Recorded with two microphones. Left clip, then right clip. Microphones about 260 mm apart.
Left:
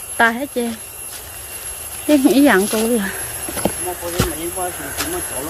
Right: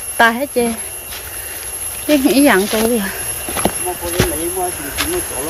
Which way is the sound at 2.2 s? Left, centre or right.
Centre.